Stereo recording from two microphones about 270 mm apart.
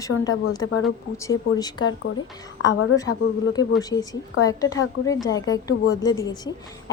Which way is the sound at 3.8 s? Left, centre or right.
Centre.